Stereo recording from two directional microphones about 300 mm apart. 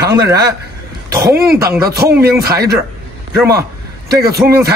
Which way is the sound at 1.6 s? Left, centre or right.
Centre.